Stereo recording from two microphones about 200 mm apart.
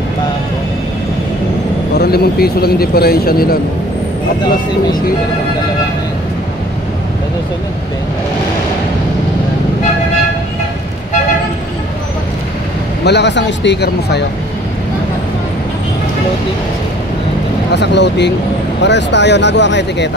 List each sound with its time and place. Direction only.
2.0 s speech: 50° left (ahead or behind)
13.0 s speech: 60° left (ahead or behind)
17.7 s speech: 60° left (ahead or behind)